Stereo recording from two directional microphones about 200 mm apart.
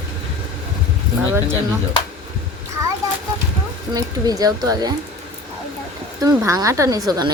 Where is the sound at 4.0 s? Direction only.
20° right (ahead or behind).